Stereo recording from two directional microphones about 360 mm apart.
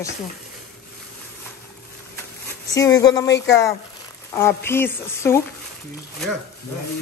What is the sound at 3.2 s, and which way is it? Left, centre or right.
Speech, left.